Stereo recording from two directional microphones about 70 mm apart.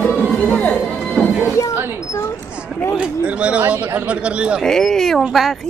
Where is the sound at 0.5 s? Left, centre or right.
Centre.